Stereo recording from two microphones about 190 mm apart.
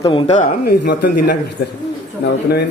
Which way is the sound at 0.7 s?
60° left (ahead or behind).